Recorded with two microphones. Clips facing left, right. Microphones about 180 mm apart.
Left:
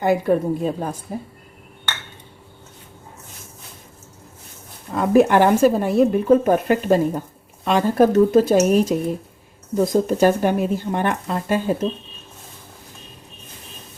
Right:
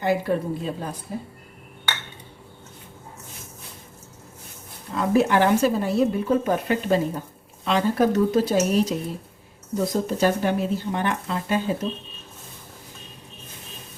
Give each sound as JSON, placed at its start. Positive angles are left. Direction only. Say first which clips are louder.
{"t": 0.0, "sound": "speech", "louder": "left 5 dB", "side_deg": 50}
{"t": 4.9, "sound": "speech", "louder": "left 5 dB", "side_deg": 50}